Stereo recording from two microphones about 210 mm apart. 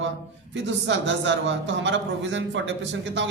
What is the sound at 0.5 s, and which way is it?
A man's voice, 55° right (ahead or behind).